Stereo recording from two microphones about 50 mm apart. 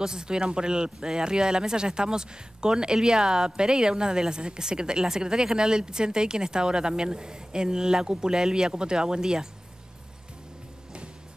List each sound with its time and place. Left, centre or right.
0.0 s speech: centre